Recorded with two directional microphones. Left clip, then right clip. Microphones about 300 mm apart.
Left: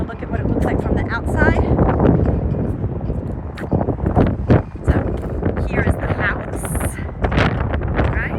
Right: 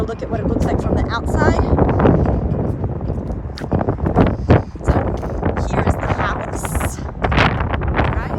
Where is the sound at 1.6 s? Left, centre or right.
Centre.